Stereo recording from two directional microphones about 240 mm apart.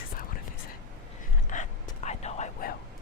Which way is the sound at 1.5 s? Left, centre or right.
Left.